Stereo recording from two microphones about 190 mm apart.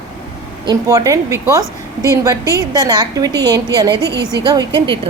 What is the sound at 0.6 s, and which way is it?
A woman's voice, 20° right (ahead or behind).